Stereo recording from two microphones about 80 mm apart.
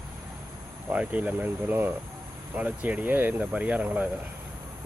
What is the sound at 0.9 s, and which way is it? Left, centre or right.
Speech, centre.